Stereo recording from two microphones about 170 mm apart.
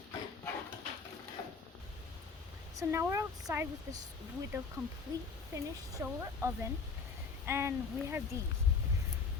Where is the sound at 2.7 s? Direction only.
15° right (ahead or behind).